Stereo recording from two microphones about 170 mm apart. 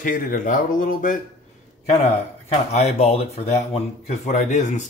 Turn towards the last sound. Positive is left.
turn(degrees=45)  # may be behind; listen again after turning